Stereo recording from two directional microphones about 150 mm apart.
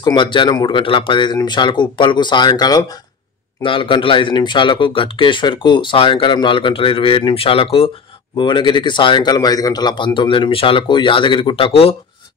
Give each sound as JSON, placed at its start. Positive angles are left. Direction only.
{"t": 0.0, "sound": "speech", "side_deg": 30}